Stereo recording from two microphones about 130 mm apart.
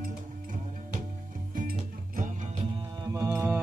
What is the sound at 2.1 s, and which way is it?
Music, 80° right.